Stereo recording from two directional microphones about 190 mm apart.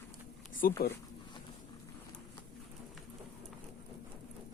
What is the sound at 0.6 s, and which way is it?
Speech, 50° left (ahead or behind).